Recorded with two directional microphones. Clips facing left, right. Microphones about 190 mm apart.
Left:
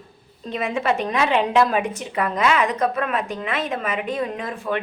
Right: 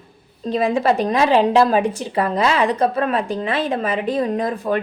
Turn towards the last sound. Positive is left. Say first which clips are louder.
# right 6 dB
turn(degrees=-40)  # may be behind; listen again after turning